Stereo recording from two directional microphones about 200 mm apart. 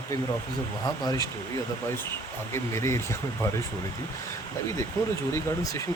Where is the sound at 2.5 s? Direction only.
15° left (ahead or behind).